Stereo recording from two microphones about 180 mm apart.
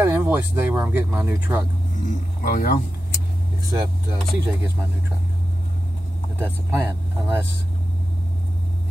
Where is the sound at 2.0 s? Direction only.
50° left (ahead or behind).